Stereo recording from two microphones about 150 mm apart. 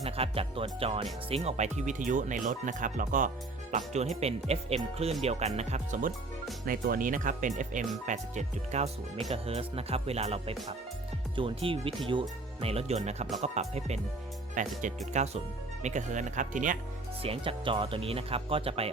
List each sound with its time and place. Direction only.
0.0 s speech: 40° right (ahead or behind)
1.3 s speech: 45° right (ahead or behind)
6.7 s speech: 70° right (ahead or behind); by 14.0 s 45° right (ahead or behind)
14.5 s speech: 60° right (ahead or behind)
17.2 s speech: 40° right (ahead or behind)